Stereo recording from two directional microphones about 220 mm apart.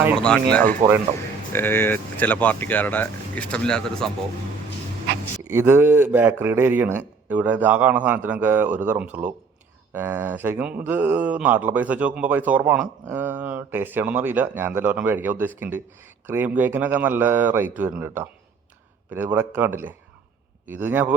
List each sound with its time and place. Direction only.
0.8 s speech: 35° right (ahead or behind)
1.5 s speech: 10° left (ahead or behind)
5.5 s speech: 10° right (ahead or behind)